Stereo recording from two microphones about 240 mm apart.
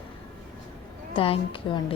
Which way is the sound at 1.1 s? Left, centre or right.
Left.